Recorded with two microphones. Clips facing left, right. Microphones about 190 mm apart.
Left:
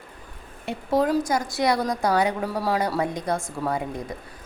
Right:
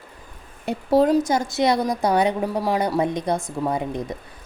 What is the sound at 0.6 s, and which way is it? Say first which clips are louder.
A woman's voice: right 5 dB; 35° right (ahead or behind).